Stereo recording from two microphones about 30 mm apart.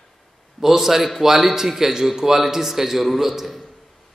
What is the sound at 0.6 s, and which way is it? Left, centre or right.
A man's voice, centre.